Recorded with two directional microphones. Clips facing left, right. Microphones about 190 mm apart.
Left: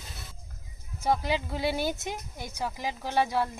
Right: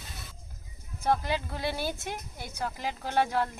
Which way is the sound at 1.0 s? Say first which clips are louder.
Left 1 dB; 15° left (ahead or behind).